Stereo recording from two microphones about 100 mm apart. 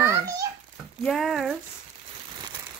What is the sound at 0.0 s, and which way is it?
Babbling, 30° right (ahead or behind).